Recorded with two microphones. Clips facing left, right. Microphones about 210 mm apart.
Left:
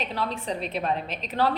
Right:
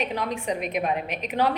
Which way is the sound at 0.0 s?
15° right (ahead or behind).